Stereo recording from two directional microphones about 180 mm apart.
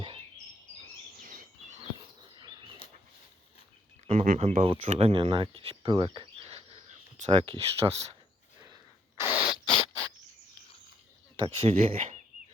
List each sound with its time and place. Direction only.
1.2 s bird vocalization: 50° right (ahead or behind)
2.3 s a sound: 25° right (ahead or behind)
4.0 s speech: 45° right (ahead or behind)
9.2 s rodents: 20° left (ahead or behind)
11.3 s speech: 30° right (ahead or behind)